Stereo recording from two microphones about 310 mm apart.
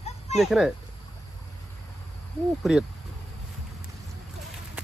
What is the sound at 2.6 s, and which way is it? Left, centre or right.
Speech, centre.